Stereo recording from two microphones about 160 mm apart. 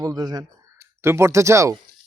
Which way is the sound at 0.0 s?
25° right (ahead or behind).